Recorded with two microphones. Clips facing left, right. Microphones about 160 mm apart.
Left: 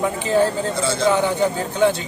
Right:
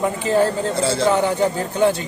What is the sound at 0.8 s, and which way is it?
Speech, 30° right (ahead or behind).